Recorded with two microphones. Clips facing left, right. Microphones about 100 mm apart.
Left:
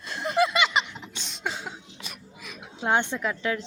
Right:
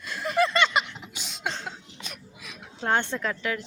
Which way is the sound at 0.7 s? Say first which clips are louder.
Even; 5° right (ahead or behind).